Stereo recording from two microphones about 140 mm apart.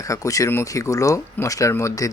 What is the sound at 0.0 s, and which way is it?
Speech, 25° left (ahead or behind).